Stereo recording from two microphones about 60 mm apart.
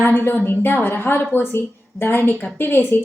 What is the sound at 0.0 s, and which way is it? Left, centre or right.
A woman's voice, left.